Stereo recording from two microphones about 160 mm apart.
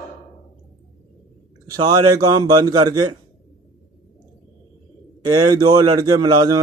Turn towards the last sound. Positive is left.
turn(degrees=-25)  # may be behind; listen again after turning